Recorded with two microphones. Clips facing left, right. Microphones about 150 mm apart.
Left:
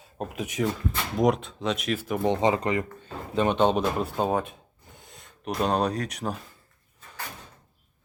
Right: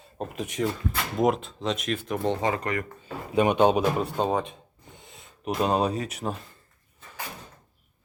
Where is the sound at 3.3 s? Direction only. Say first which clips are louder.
Right 2 dB; 10° right (ahead or behind).